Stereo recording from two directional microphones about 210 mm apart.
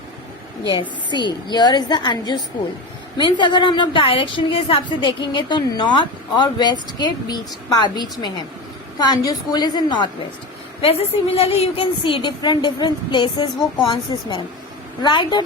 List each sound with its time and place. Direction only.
0.7 s a woman's voice: 20° left (ahead or behind)